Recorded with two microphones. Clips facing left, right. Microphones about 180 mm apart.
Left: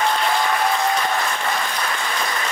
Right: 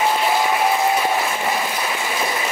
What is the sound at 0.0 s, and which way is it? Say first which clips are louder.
Applause: right 2 dB; 10° right (ahead or behind).